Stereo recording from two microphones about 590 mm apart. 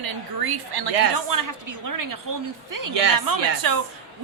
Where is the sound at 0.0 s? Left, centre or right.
Right.